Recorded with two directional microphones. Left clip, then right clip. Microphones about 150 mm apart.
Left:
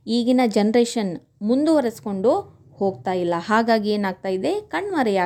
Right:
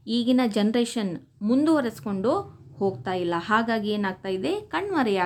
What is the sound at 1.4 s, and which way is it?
A woman's voice, 20° left (ahead or behind).